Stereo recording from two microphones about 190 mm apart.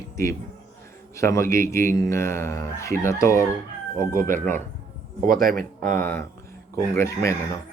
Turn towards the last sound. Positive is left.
turn(degrees=15)  # may be behind; listen again after turning